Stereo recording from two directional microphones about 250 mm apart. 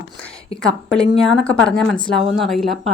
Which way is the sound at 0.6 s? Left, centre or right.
Centre.